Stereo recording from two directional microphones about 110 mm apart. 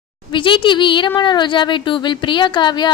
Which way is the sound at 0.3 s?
50° left (ahead or behind).